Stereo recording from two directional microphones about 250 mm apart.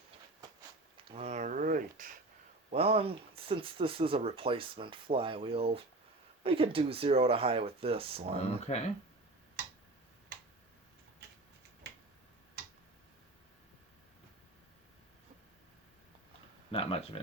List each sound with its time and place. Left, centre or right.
1.0 s a sound: right
2.6 s speech: right
8.4 s speech: left
16.7 s speech: left